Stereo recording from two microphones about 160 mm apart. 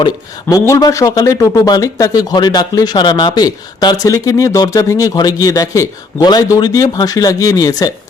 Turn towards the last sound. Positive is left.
turn(degrees=20)  # may be behind; listen again after turning